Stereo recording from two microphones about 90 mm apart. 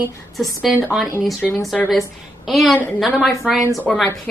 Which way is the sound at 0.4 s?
Centre (ahead or behind).